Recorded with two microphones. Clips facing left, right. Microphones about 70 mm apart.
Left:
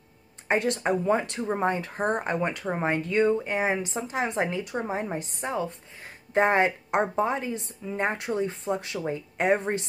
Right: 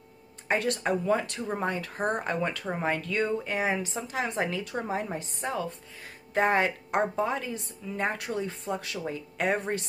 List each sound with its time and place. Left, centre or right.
0.5 s a woman's voice: left